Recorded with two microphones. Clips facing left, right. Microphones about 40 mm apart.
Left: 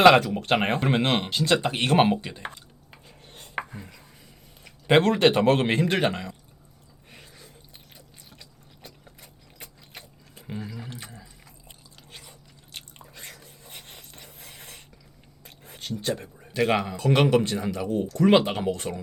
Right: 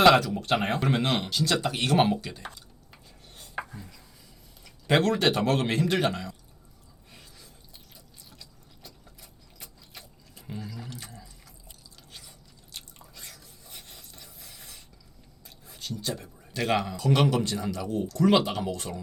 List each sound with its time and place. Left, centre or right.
0.0 s speech: left
2.2 s chopping: left
4.6 s speech: left
7.1 s a sound: left
10.4 s drip: left
15.4 s a sound: left
16.5 s speech: centre
17.0 s speech: left